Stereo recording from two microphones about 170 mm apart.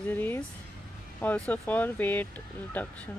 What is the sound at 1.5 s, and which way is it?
Speech, 10° left (ahead or behind).